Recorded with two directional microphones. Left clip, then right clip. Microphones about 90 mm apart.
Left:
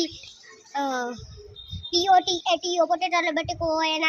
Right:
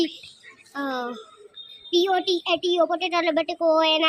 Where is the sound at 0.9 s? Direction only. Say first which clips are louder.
Right 3 dB; 90° left.